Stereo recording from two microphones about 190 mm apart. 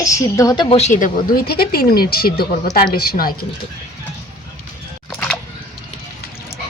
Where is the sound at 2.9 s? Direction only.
50° left (ahead or behind).